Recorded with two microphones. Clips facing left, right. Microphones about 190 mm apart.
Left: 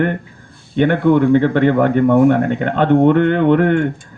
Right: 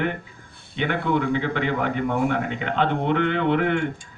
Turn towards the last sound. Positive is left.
turn(degrees=50)  # may be behind; listen again after turning